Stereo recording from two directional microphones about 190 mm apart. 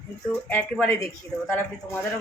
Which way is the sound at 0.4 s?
5° left (ahead or behind).